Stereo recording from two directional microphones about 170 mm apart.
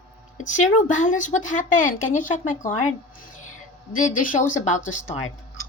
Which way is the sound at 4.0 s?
50° left (ahead or behind).